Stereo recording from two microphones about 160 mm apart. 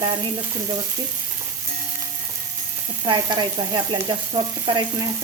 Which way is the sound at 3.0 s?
30° right (ahead or behind).